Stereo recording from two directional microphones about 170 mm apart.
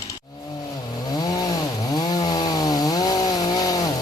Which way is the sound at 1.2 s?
25° left (ahead or behind).